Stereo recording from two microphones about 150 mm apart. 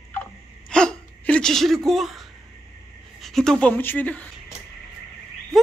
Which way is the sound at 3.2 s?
5° left (ahead or behind).